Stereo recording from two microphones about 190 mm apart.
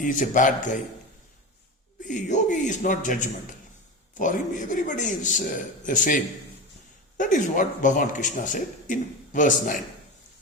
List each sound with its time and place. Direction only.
0.0 s speech: 45° left (ahead or behind)
2.0 s speech: 40° left (ahead or behind)
7.2 s speech: 40° left (ahead or behind)